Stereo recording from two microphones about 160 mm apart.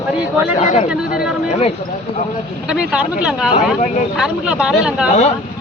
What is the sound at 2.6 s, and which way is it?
Speech, 5° right (ahead or behind).